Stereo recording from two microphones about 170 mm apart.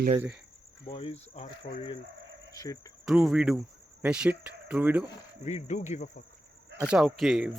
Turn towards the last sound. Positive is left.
turn(degrees=-5)  # may be behind; listen again after turning